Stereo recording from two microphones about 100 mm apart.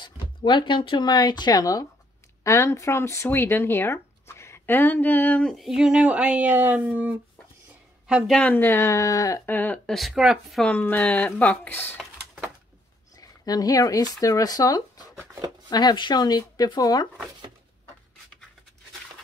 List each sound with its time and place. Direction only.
0.0 s speech: 50° left (ahead or behind); by 5.5 s 15° left (ahead or behind)
5.5 s speech: centre (ahead or behind); by 7.2 s 15° right (ahead or behind)
8.3 s speech: 15° left (ahead or behind); by 9.4 s 35° left (ahead or behind)
9.5 s speech: 20° left (ahead or behind)
9.8 s speech: centre (ahead or behind)
10.6 s speech: 15° left (ahead or behind)
13.2 s speech: 40° left (ahead or behind)